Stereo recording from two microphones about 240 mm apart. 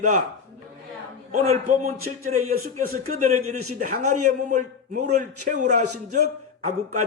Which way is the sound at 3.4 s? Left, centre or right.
Right.